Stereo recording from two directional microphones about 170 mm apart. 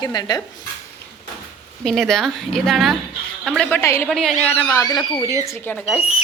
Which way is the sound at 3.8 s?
15° left (ahead or behind).